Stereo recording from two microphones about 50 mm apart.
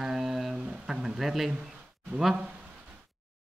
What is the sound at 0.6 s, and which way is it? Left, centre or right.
Speech, centre.